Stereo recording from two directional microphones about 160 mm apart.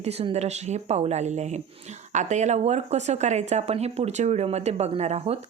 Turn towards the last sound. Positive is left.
turn(degrees=-40)  # may be behind; listen again after turning